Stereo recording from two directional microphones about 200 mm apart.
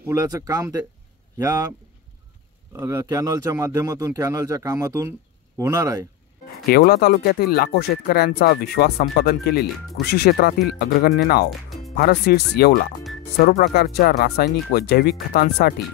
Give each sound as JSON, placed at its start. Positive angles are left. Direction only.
{"t": 0.0, "sound": "speech", "side_deg": -15}
{"t": 2.7, "sound": "speech", "side_deg": -15}
{"t": 6.7, "sound": "speech", "side_deg": 50}